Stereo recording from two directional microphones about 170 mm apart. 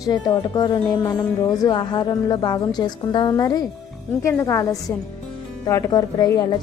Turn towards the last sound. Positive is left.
turn(degrees=20)  # may be behind; listen again after turning